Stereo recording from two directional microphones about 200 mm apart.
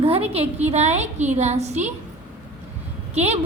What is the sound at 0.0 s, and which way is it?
A woman's voice, 30° right (ahead or behind).